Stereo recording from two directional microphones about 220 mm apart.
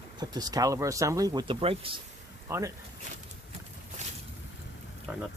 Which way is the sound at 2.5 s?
15° right (ahead or behind).